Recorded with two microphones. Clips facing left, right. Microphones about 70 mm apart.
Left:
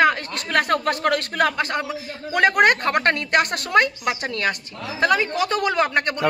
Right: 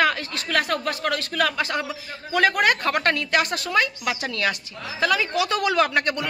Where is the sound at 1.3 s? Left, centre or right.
Left.